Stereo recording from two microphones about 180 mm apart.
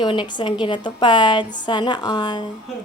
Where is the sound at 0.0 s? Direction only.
25° left (ahead or behind).